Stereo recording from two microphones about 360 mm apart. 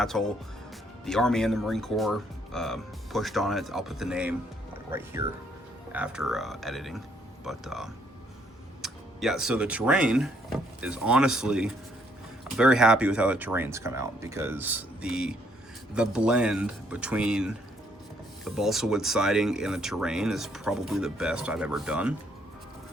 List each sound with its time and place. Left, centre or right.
0.0 s speech: centre